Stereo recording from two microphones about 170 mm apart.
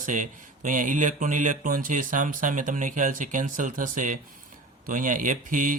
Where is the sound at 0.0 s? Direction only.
50° right (ahead or behind).